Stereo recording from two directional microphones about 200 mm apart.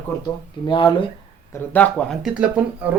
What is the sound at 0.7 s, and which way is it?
Speech, 25° left (ahead or behind).